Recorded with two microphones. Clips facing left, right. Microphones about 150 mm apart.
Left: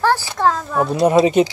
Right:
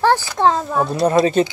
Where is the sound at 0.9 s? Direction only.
15° left (ahead or behind).